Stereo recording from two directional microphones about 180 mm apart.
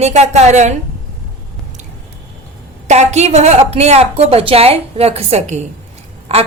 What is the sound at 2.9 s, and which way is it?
A woman's voice, 40° right (ahead or behind).